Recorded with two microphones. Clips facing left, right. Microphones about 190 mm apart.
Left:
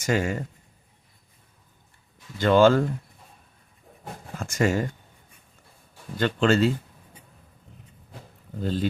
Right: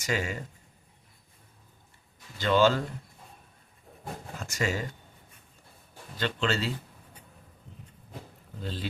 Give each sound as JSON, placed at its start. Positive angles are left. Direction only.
{"t": 0.0, "sound": "speech", "side_deg": 50}
{"t": 2.4, "sound": "speech", "side_deg": 50}
{"t": 4.4, "sound": "speech", "side_deg": 50}
{"t": 6.1, "sound": "speech", "side_deg": 50}
{"t": 8.6, "sound": "speech", "side_deg": 45}